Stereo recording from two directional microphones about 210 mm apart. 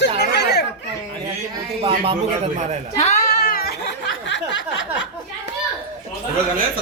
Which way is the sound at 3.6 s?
50° left (ahead or behind).